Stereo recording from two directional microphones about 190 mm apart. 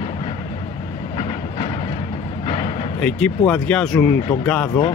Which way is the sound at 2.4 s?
30° left (ahead or behind).